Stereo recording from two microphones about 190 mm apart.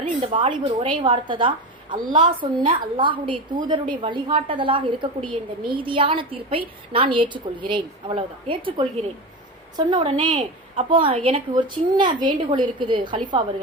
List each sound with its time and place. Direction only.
0.0 s a woman's voice: 30° right (ahead or behind)